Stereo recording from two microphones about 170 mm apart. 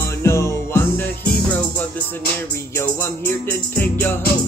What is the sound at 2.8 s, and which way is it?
Music, 15° left (ahead or behind).